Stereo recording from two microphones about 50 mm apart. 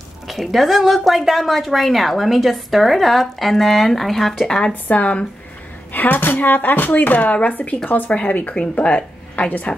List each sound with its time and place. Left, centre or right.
0.3 s a woman's voice: centre
4.9 s a woman's voice: left